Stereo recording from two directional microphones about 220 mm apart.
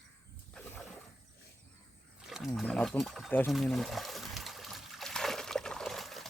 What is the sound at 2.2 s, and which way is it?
Wild animals, centre (ahead or behind).